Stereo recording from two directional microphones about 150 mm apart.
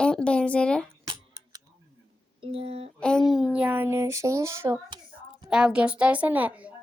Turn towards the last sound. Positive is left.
turn(degrees=-10)  # may be behind; listen again after turning